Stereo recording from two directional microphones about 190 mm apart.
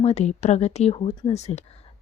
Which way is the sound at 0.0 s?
35° left (ahead or behind).